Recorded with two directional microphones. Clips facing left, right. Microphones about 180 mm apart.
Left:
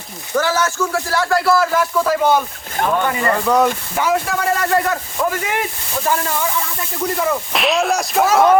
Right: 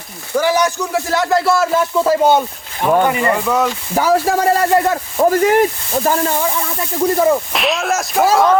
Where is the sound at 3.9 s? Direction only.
35° right (ahead or behind).